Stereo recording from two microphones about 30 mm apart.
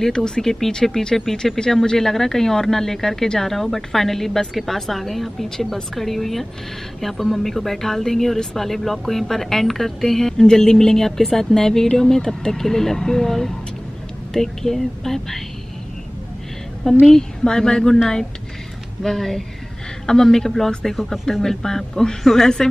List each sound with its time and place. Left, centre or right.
0.0 s speech: left
1.1 s speech: centre
16.8 s speech: centre
17.5 s speech: left
19.0 s speech: centre